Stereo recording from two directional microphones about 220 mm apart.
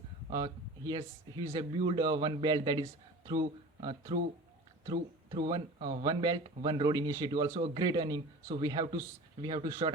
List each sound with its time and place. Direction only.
0.3 s speech: 15° right (ahead or behind)
5.5 s speech: 20° right (ahead or behind)